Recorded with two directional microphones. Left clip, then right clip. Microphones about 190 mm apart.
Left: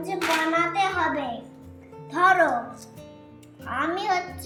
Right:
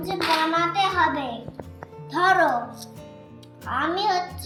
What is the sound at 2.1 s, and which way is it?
Speech, 25° left (ahead or behind).